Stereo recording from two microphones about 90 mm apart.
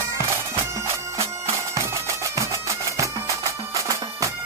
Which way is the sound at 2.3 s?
35° right (ahead or behind).